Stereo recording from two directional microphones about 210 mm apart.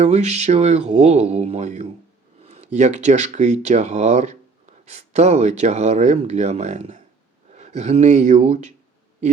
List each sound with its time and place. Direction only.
0.0 s speech: 30° right (ahead or behind)